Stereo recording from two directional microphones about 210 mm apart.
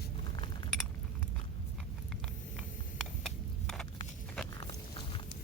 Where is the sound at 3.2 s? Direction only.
Centre (ahead or behind).